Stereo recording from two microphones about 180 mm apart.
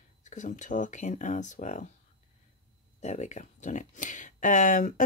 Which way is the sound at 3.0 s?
40° left (ahead or behind).